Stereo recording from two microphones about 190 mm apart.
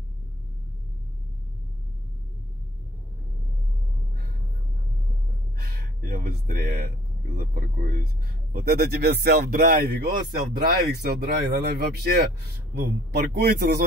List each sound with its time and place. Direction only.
5.6 s speech: 55° right (ahead or behind)